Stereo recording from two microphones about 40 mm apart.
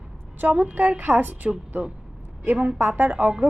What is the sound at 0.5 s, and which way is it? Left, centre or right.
A woman's voice, right.